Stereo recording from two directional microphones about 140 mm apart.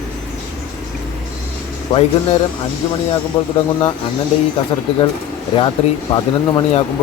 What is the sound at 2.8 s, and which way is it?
Speech, 35° left (ahead or behind).